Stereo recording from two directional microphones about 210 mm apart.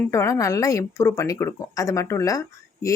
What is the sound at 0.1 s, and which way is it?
Speech, 15° left (ahead or behind).